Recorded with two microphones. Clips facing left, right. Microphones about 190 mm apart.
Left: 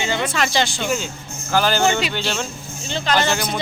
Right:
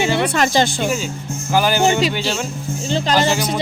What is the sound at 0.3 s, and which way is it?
Speech, 45° right (ahead or behind).